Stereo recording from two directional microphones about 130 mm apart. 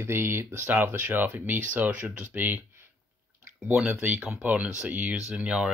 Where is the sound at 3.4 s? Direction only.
5° right (ahead or behind).